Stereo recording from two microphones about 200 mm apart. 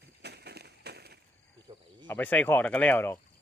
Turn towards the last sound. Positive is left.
turn(degrees=10)  # may be behind; listen again after turning